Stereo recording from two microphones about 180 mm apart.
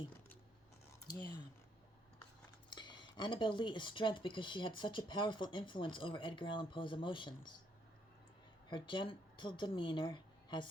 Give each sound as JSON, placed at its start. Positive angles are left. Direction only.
{"t": 2.6, "sound": "speech", "side_deg": 25}
{"t": 8.7, "sound": "speech", "side_deg": 25}